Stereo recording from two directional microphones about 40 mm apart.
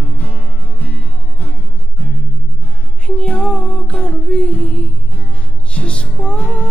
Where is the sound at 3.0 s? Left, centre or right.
Left.